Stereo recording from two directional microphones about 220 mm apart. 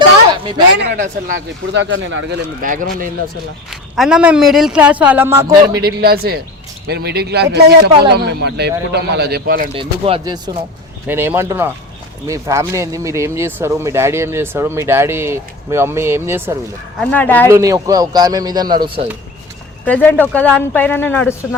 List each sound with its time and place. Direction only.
0.8 s a man's voice: 45° right (ahead or behind)
1.8 s speech: 60° right (ahead or behind)
2.6 s speech: 35° right (ahead or behind)
3.7 s a man's voice: centre (ahead or behind)
5.7 s a man's voice: 45° right (ahead or behind)
9.7 s speech: 25° right (ahead or behind)
17.0 s speech: 5° left (ahead or behind)
17.5 s speech: 15° right (ahead or behind)
19.8 s speech: 5° left (ahead or behind)